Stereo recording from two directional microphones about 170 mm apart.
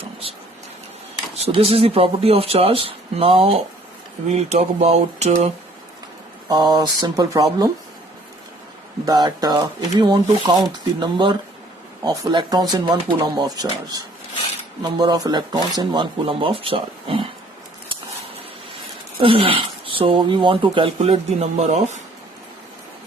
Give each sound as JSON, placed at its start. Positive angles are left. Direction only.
{"t": 1.5, "sound": "speech", "side_deg": -35}
{"t": 6.5, "sound": "speech", "side_deg": -25}
{"t": 9.0, "sound": "speech", "side_deg": -25}
{"t": 19.2, "sound": "speech", "side_deg": -30}